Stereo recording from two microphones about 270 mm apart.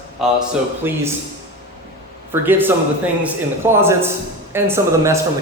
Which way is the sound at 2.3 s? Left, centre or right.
Centre.